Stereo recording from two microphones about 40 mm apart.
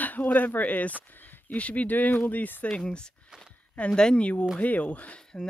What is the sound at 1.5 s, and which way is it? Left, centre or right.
Speech, left.